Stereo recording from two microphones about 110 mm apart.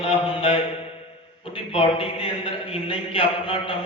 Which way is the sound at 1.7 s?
60° left (ahead or behind).